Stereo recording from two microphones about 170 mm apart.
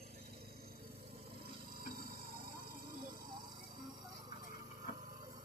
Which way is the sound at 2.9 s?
55° right (ahead or behind).